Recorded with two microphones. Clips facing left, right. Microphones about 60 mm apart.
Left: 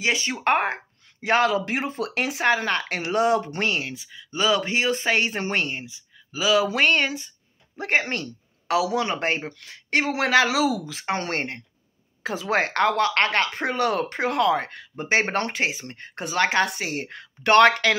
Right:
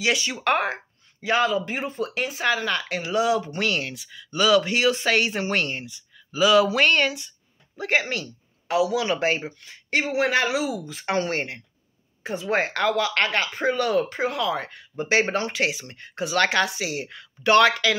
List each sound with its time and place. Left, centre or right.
0.0 s speech: left
1.2 s speech: left
3.6 s speech: left
7.8 s a woman's voice: left
9.5 s speech: left
11.1 s speech: left
12.4 s speech: left
15.0 s speech: left
15.3 s speech: left
15.6 s speech: left
16.6 s speech: left